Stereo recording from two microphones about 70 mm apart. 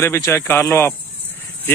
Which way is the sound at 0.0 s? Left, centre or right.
Left.